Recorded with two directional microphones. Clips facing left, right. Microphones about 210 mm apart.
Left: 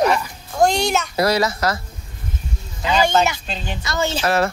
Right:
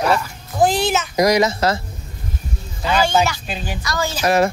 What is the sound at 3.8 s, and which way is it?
Speech, 25° left (ahead or behind).